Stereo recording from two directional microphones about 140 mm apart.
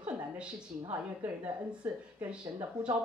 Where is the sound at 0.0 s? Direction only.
5° right (ahead or behind).